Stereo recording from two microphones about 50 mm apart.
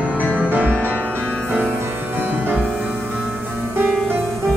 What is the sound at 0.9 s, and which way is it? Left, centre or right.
Music, right.